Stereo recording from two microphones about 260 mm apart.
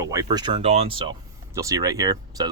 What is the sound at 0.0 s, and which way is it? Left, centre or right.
Speech, centre.